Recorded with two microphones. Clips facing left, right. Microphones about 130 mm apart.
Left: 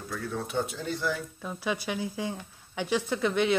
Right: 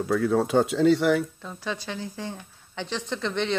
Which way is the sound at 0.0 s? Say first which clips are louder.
Right 12 dB; 90° right.